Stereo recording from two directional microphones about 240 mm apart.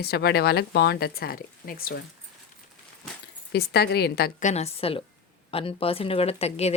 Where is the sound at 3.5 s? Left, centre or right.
Left.